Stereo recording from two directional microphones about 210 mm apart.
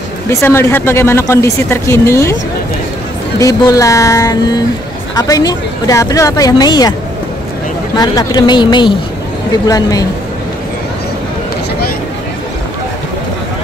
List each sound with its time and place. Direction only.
0.3 s speech: 10° left (ahead or behind)
3.3 s speech: 15° left (ahead or behind)
7.9 s a woman's voice: 20° left (ahead or behind)